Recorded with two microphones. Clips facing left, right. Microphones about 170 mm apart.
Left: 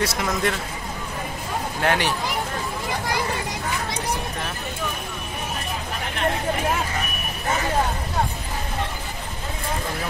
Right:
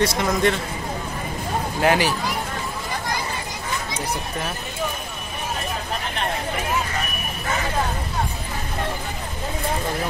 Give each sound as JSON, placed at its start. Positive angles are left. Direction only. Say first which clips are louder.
{"t": 0.0, "sound": "speech", "louder": "right 4 dB", "side_deg": 5}
{"t": 1.8, "sound": "speech", "louder": "right 3 dB", "side_deg": -5}